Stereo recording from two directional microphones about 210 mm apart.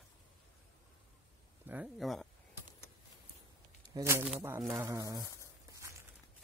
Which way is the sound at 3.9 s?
10° right (ahead or behind).